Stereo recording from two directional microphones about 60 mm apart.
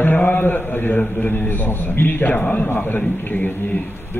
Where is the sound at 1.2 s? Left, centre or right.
Left.